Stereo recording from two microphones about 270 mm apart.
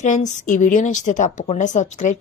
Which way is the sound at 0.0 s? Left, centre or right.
Left.